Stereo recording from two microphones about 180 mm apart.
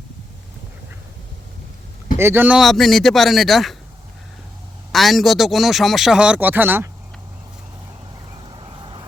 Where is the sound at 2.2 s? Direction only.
10° right (ahead or behind).